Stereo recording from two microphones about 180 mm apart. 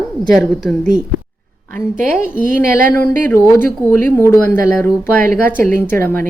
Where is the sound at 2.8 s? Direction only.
10° left (ahead or behind).